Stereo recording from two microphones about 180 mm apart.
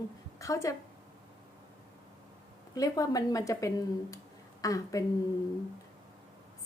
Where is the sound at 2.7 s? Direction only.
20° left (ahead or behind).